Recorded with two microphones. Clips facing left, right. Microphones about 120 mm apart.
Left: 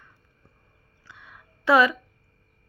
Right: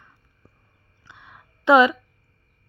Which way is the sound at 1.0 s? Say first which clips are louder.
Right 1 dB; 20° right (ahead or behind).